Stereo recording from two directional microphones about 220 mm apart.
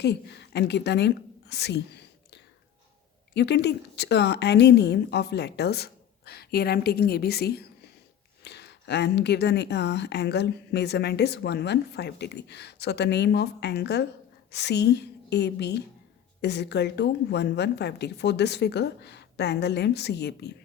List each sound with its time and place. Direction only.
0.0 s speech: 50° left (ahead or behind)
3.3 s speech: 50° left (ahead or behind)